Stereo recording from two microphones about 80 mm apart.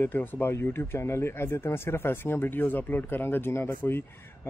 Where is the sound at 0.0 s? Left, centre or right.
Left.